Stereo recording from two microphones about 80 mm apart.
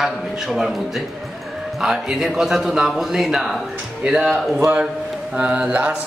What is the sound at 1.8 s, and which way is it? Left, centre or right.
A man's voice, centre.